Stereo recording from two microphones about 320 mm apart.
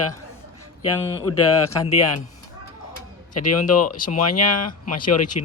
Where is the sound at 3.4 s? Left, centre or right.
Left.